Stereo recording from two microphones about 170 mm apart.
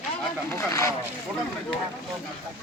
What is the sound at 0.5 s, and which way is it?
Speech, 20° left (ahead or behind).